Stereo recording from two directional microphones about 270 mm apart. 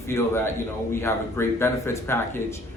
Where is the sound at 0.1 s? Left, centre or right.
Centre.